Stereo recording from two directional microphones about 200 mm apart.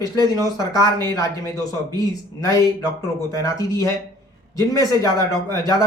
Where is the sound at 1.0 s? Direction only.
15° left (ahead or behind).